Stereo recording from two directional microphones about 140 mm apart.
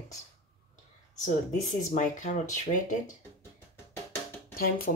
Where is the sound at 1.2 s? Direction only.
65° left (ahead or behind).